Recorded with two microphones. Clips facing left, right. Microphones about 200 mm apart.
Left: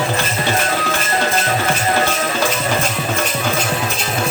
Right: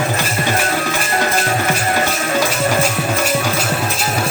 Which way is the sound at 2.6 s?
10° right (ahead or behind).